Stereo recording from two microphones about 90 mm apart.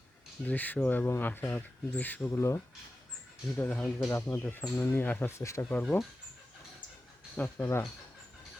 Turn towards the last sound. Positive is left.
turn(degrees=25)  # may be behind; listen again after turning